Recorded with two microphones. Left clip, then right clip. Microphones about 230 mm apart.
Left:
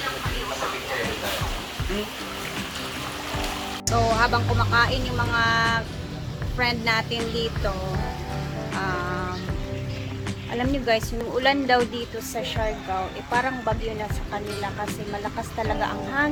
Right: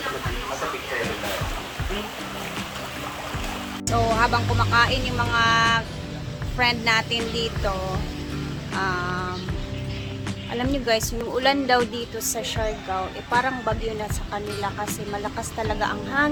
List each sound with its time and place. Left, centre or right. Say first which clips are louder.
3.8 s speech: even; centre
8.8 s music: right 3 dB; centre
10.6 s speech: even; centre
13.3 s speech: right 2 dB; centre
15.8 s speech: right 3 dB; centre